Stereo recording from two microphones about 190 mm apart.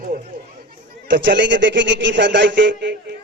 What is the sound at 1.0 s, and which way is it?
A man's voice, 70° right (ahead or behind).